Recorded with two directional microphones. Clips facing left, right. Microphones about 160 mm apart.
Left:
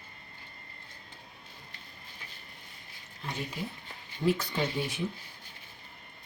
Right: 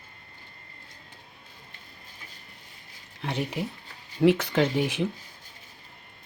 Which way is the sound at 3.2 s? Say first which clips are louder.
Right 7 dB; 75° right (ahead or behind).